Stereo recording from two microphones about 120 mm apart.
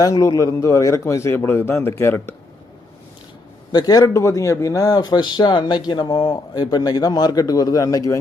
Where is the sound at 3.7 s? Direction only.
35° left (ahead or behind).